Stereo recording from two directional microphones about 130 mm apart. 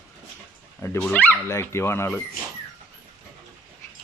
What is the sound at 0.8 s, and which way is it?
Speech, 20° left (ahead or behind).